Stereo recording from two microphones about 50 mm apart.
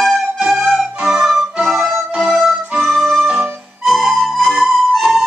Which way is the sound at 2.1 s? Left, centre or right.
Centre.